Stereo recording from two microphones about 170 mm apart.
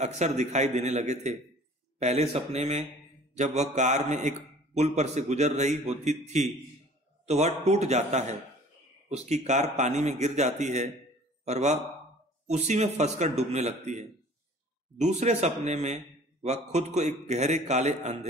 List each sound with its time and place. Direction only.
0.0 s a man's voice: 45° right (ahead or behind)